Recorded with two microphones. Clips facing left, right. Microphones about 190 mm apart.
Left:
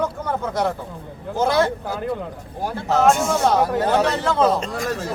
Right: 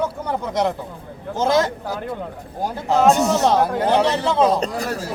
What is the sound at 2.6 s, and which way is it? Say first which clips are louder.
A man's voice: right 1 dB; 15° right (ahead or behind).